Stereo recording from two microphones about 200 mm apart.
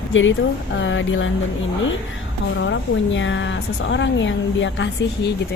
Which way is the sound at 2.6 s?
70° left (ahead or behind).